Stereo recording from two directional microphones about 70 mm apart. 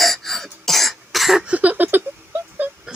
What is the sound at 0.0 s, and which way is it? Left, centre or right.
Cough, centre.